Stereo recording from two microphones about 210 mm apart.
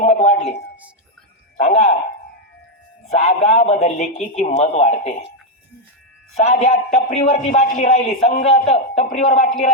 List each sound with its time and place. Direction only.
0.0 s a sound: 30° left (ahead or behind)
1.5 s a man's voice: 30° left (ahead or behind)
3.2 s a man's voice: 30° left (ahead or behind)
6.3 s a man's voice: 30° left (ahead or behind)